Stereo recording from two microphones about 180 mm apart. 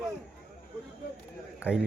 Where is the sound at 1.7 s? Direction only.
5° right (ahead or behind).